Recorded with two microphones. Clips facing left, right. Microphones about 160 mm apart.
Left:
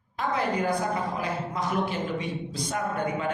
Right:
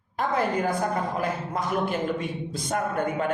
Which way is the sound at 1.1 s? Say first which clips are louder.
Right 2 dB; 50° right (ahead or behind).